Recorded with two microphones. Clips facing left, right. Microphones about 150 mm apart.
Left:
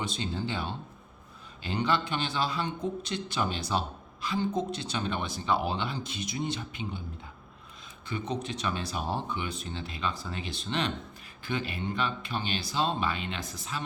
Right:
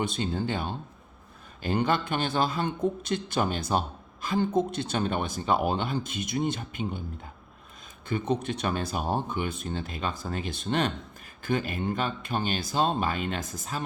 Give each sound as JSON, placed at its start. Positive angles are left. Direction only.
{"t": 0.0, "sound": "speech", "side_deg": -50}
{"t": 8.0, "sound": "speech", "side_deg": -50}